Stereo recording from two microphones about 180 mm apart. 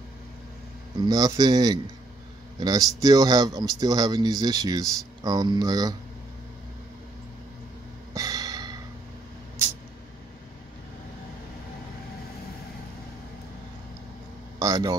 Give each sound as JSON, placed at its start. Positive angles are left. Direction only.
{"t": 1.0, "sound": "speech", "side_deg": -20}
{"t": 8.1, "sound": "a sound", "side_deg": -20}
{"t": 14.6, "sound": "speech", "side_deg": -20}